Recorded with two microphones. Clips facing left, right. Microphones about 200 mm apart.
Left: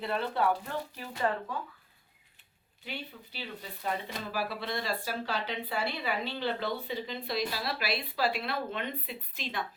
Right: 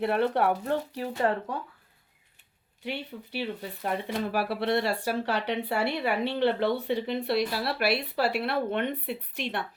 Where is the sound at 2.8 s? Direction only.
70° right (ahead or behind).